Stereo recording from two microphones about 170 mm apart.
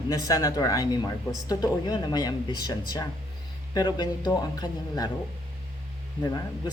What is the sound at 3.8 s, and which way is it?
Speech, 25° left (ahead or behind).